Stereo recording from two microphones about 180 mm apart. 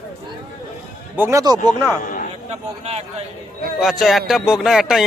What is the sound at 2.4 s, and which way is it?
Speech, 35° right (ahead or behind).